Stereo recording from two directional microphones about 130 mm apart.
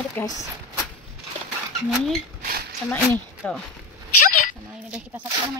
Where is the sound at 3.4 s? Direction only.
10° left (ahead or behind).